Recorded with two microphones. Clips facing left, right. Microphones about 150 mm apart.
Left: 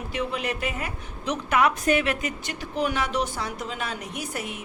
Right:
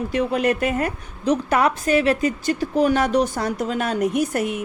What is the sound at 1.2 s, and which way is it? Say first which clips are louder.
A woman's voice: right 4 dB; 35° right (ahead or behind).